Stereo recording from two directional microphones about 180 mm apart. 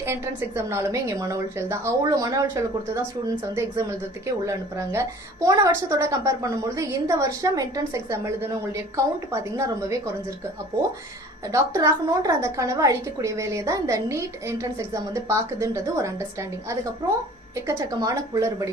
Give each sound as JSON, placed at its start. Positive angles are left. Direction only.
{"t": 0.0, "sound": "a woman's voice", "side_deg": -15}
{"t": 11.5, "sound": "a woman's voice", "side_deg": -15}